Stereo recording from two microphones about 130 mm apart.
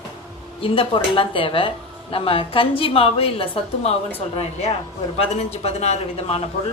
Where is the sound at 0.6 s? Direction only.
45° left (ahead or behind).